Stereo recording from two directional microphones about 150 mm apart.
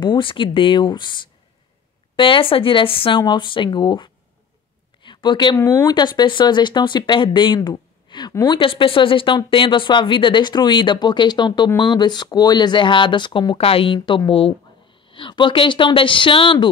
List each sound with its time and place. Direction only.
0.0 s speech: 35° left (ahead or behind)